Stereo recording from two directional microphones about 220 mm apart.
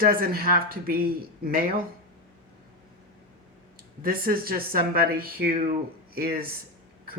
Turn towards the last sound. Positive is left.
turn(degrees=-45)  # may be behind; listen again after turning